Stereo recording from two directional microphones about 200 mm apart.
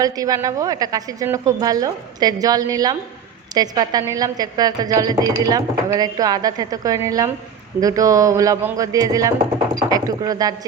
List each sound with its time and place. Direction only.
0.0 s a woman's voice: 15° right (ahead or behind)